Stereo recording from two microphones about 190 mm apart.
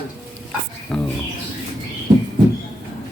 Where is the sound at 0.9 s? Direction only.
Centre (ahead or behind).